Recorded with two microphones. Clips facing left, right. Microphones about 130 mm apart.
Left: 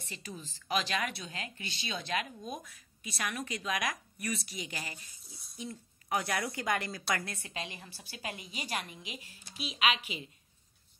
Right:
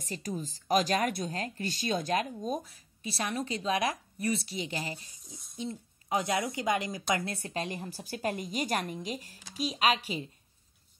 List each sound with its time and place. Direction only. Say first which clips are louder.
0.0 s a woman's voice: right 9 dB; 40° right (ahead or behind); by 7.2 s 15° right (ahead or behind)
7.2 s a woman's voice: right 7 dB; 35° right (ahead or behind)